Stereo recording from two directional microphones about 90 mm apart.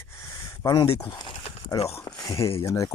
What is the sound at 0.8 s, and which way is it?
Speech, 75° left (ahead or behind).